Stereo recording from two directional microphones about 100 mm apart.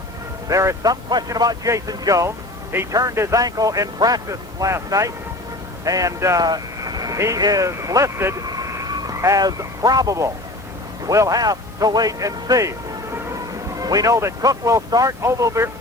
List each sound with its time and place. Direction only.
0.4 s speech: 30° right (ahead or behind)
6.4 s speech: 40° right (ahead or behind)
8.4 s a sound: 35° right (ahead or behind)
11.0 s a man's voice: 35° right (ahead or behind)